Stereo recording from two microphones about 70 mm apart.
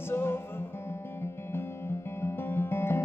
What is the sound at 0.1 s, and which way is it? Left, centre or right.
Music, left.